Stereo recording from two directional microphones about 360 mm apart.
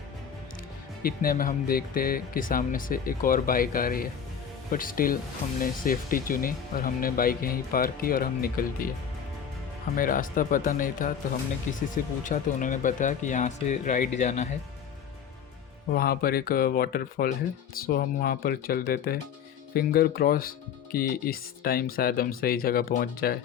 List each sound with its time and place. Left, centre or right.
1.0 s speech: left
9.9 s speech: left
16.0 s speech: left